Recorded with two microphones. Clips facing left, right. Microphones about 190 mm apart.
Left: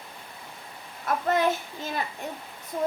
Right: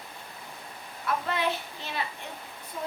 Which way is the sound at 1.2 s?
45° left (ahead or behind).